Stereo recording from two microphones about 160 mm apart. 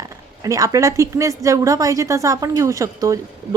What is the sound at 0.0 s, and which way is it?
A woman's voice, 20° right (ahead or behind).